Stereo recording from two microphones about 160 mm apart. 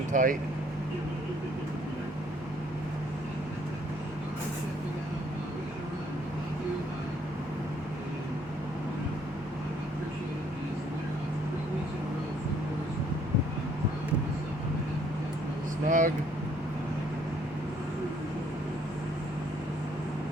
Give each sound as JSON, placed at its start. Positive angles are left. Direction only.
{"t": 0.1, "sound": "speech", "side_deg": -55}
{"t": 15.9, "sound": "vehicle", "side_deg": -50}